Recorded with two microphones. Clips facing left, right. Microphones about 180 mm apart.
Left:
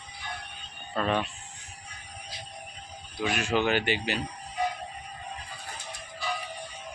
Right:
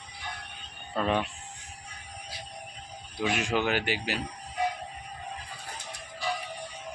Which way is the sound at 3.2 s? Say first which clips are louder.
Right 1 dB; 20° right (ahead or behind).